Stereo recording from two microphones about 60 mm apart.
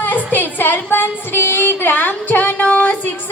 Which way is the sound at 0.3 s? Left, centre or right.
Left.